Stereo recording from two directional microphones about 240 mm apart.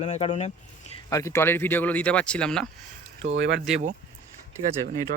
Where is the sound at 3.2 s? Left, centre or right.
Right.